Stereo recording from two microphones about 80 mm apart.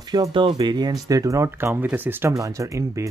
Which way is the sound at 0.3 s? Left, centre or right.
Right.